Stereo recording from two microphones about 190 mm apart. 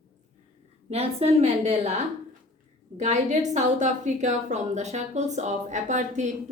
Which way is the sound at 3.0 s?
40° right (ahead or behind).